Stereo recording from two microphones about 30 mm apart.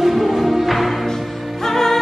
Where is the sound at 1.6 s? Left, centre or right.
Centre.